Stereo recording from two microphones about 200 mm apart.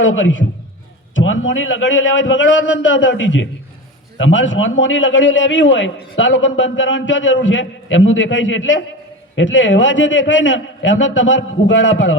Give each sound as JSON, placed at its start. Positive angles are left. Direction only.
{"t": 0.0, "sound": "a man's voice", "side_deg": 70}